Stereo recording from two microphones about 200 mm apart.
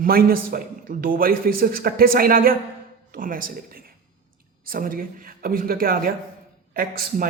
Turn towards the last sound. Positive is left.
turn(degrees=-45)  # may be behind; listen again after turning